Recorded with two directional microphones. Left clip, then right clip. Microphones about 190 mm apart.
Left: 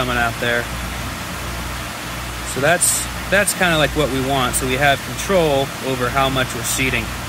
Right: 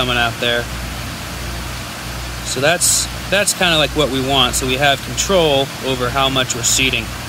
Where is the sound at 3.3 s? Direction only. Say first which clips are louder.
Right 1 dB; 15° right (ahead or behind).